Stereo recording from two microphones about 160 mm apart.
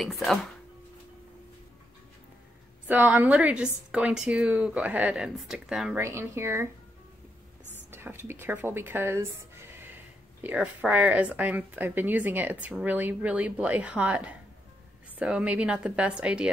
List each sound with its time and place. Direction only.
0.0 s speech: centre (ahead or behind)
2.9 s a woman's voice: 10° right (ahead or behind)
5.9 s a woman's voice: 15° right (ahead or behind)
7.9 s a woman's voice: 15° right (ahead or behind)